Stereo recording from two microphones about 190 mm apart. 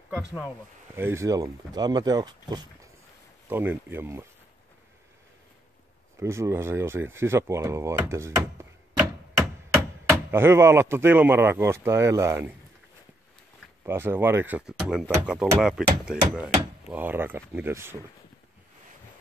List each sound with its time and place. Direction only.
0.9 s speech: 15° right (ahead or behind)
6.1 s speech: 15° right (ahead or behind)
10.0 s speech: 15° right (ahead or behind)
13.8 s speech: 10° right (ahead or behind)